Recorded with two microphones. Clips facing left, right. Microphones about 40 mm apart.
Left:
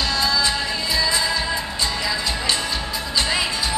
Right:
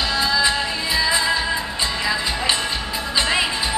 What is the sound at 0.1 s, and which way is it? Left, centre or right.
Music, centre.